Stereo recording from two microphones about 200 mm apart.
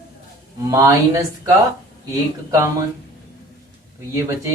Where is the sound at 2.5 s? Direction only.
15° right (ahead or behind).